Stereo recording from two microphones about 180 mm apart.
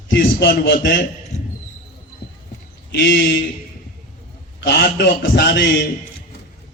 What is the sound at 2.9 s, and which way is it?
Speech, 80° left.